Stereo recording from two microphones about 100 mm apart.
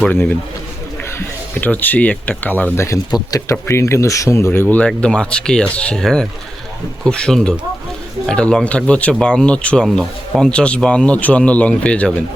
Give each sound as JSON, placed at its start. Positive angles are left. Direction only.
{"t": 0.1, "sound": "speech", "side_deg": 20}
{"t": 1.6, "sound": "speech", "side_deg": 15}
{"t": 3.1, "sound": "speech", "side_deg": 40}
{"t": 3.5, "sound": "speech", "side_deg": 25}
{"t": 4.8, "sound": "speech", "side_deg": 10}